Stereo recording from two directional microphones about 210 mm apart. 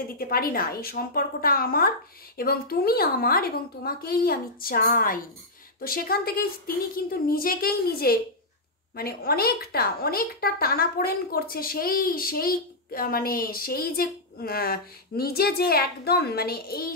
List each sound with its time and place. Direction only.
0.2 s a woman's voice: 45° left (ahead or behind)